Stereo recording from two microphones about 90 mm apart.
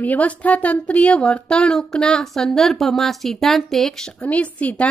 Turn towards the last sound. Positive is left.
turn(degrees=15)  # may be behind; listen again after turning